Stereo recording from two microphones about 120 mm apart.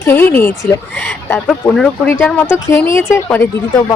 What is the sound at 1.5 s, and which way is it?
A woman's voice, 5° left (ahead or behind).